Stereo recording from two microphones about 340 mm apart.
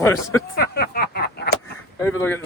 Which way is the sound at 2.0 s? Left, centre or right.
Centre.